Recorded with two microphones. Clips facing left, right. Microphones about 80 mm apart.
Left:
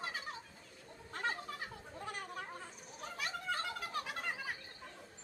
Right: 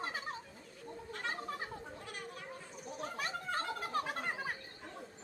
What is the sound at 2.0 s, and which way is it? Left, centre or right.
Chatter, left.